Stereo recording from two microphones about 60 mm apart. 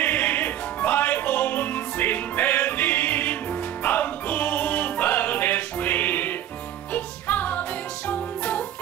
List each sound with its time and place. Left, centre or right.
0.0 s music: left